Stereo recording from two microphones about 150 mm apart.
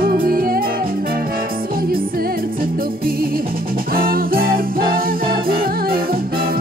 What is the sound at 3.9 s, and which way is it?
Music, 80° right.